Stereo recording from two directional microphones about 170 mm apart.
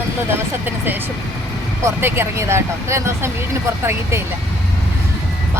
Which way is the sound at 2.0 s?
15° right (ahead or behind).